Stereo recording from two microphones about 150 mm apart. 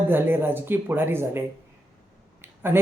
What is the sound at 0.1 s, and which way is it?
Speech, 15° right (ahead or behind).